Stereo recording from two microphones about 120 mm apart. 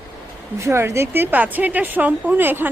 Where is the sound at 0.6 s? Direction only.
25° right (ahead or behind).